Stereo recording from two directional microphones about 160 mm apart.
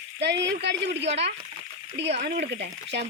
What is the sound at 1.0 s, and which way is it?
Speech, 40° right (ahead or behind).